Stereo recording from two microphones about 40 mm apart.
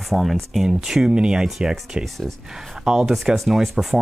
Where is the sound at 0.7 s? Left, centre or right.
Centre.